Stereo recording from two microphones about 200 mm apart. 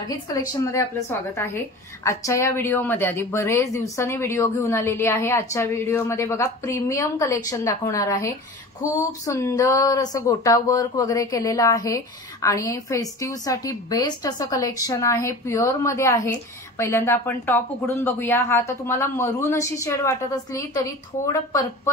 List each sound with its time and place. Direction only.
0.1 s speech: 15° left (ahead or behind)
21.3 s speech: 15° left (ahead or behind)